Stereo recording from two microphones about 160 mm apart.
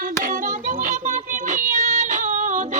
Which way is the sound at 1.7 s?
50° right (ahead or behind).